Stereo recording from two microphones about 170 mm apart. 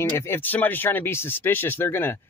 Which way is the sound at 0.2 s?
10° left (ahead or behind).